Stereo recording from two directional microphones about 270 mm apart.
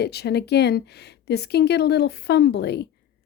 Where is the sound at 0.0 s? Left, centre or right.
Left.